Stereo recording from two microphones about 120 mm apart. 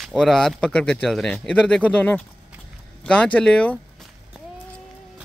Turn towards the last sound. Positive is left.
turn(degrees=10)  # may be behind; listen again after turning